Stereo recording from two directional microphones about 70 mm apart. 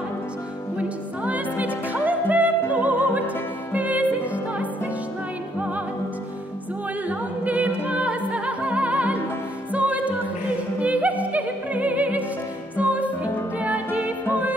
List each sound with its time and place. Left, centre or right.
0.7 s music: right
7.1 s music: right